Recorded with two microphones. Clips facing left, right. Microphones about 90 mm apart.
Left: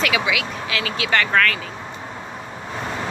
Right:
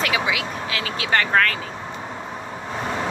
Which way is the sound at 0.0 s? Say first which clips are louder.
Left 1 dB; 40° right (ahead or behind).